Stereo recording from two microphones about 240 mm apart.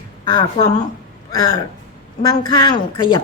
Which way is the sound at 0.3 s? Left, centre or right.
Centre.